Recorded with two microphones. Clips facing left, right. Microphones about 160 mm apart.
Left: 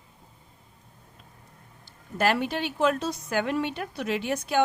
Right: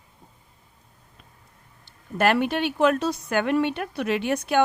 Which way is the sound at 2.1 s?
60° right (ahead or behind).